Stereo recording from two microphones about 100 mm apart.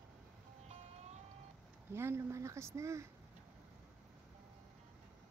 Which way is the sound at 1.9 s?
25° right (ahead or behind).